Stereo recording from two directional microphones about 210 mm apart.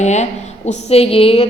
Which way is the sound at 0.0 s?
35° left (ahead or behind).